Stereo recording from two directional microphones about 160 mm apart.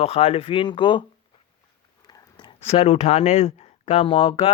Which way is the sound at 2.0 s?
30° left (ahead or behind).